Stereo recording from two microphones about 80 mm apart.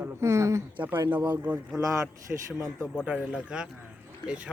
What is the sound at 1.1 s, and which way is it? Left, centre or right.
Speech, right.